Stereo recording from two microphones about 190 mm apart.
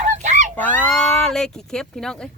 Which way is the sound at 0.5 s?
10° left (ahead or behind).